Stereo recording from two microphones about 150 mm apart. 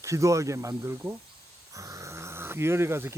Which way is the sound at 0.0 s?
20° right (ahead or behind).